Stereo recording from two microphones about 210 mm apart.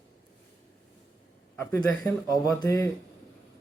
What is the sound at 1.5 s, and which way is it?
Speech, 10° left (ahead or behind).